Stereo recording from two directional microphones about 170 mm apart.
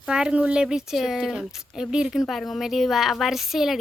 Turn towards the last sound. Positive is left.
turn(degrees=0)  # may be behind; listen again after turning